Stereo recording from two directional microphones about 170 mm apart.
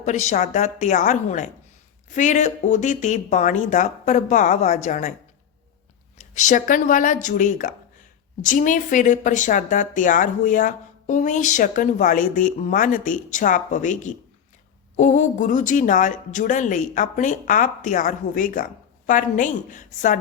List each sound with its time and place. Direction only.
0.0 s speech: 45° left (ahead or behind)
6.3 s speech: 50° left (ahead or behind)